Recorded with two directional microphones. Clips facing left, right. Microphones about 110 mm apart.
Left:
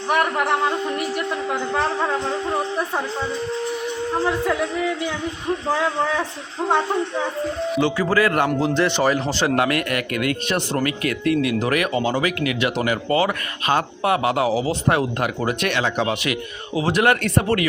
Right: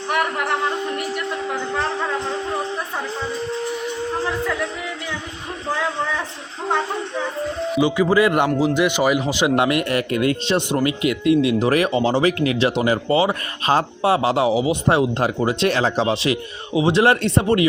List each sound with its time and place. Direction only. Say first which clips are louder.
7.8 s a man's voice: right 3 dB; 10° right (ahead or behind)
8.4 s a man's voice: right 1 dB; 5° right (ahead or behind)
9.6 s speech: right 2 dB; 20° right (ahead or behind)